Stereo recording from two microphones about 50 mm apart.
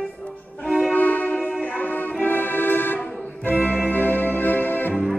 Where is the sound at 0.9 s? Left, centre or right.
Left.